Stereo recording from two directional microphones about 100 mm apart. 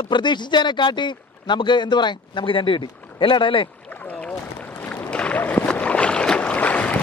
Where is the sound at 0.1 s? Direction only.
50° left (ahead or behind).